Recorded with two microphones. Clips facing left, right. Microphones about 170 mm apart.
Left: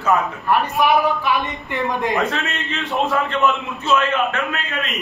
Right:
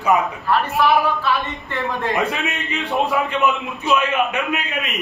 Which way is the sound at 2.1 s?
15° right (ahead or behind).